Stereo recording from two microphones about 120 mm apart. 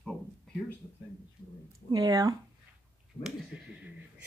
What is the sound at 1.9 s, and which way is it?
Speech, 30° right (ahead or behind).